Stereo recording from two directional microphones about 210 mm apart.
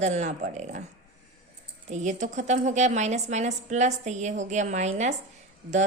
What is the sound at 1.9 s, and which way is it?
A woman's voice, 35° right (ahead or behind).